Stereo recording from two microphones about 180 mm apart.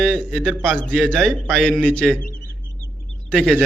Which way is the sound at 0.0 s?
Centre (ahead or behind).